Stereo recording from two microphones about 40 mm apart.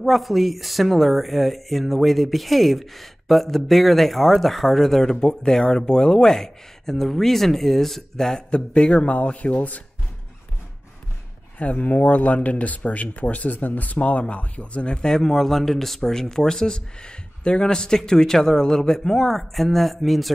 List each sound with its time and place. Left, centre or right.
0.0 s speech: centre
5.1 s speech: centre
8.4 s speech: left
11.5 s speech: left; by 20.3 s centre